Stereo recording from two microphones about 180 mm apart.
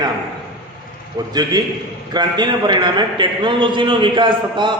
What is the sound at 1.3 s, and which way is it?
A man's voice, 20° right (ahead or behind).